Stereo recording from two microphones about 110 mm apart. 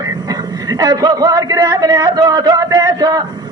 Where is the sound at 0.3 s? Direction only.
35° right (ahead or behind).